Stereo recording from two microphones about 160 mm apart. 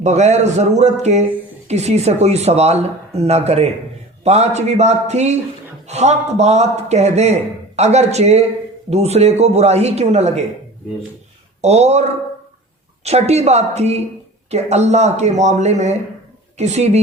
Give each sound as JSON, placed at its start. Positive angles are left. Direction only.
{"t": 0.0, "sound": "a man's voice", "side_deg": -45}
{"t": 11.6, "sound": "a man's voice", "side_deg": -45}
{"t": 13.1, "sound": "a man's voice", "side_deg": -40}